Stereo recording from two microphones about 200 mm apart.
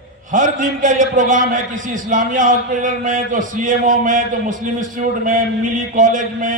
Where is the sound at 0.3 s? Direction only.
40° right (ahead or behind).